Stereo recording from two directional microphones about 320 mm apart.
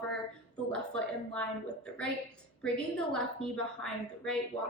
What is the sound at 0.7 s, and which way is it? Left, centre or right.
Speech, centre.